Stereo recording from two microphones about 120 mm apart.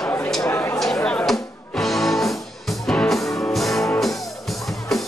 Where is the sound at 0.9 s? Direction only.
10° left (ahead or behind).